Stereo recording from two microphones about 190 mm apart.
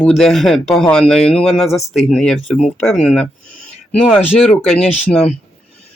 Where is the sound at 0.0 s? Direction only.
5° left (ahead or behind).